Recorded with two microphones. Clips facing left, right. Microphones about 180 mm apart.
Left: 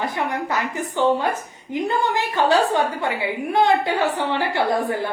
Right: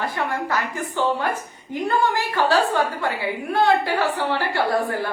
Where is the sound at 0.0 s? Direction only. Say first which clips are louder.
Left 1 dB; 20° left (ahead or behind).